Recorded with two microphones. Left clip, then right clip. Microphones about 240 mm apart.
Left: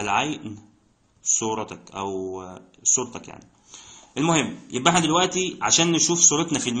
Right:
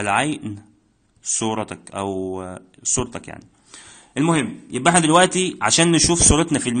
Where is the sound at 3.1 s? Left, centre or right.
Right.